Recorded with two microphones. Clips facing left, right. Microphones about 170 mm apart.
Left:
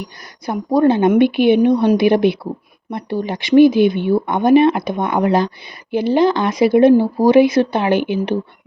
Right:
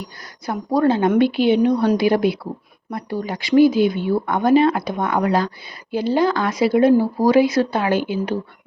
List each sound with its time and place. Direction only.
0.4 s speech: 20° left (ahead or behind)